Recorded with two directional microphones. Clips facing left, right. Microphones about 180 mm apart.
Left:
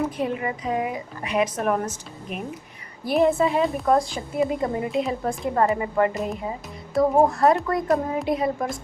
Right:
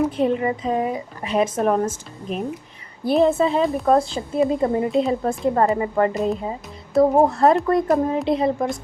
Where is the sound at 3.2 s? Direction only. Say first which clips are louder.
Right 2 dB; 30° right (ahead or behind).